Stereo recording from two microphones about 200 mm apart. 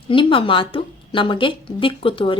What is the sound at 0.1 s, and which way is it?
Speech, 25° left (ahead or behind).